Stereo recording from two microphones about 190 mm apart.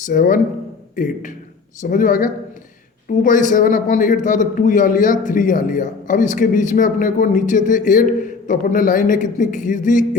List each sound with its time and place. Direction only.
0.0 s a man's voice: 45° left (ahead or behind)